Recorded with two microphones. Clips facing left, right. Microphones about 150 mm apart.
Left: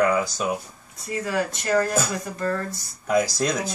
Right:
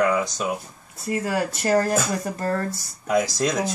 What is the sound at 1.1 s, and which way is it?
Speech, 45° right (ahead or behind).